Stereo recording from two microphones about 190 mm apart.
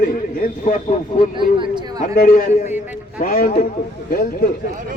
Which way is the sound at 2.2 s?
50° left (ahead or behind).